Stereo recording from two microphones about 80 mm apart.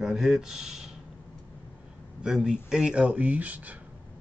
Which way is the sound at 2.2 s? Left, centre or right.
Centre.